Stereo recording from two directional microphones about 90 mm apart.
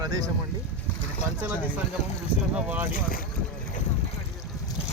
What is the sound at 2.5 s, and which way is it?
Speech, 15° right (ahead or behind).